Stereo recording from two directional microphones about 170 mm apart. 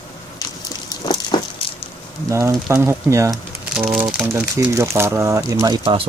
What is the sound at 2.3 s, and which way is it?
Speech, 15° right (ahead or behind).